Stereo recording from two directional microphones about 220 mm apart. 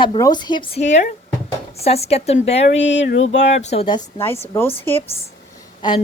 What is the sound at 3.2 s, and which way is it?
Speech, 30° left (ahead or behind).